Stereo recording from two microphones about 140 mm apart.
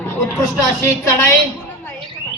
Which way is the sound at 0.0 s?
20° left (ahead or behind).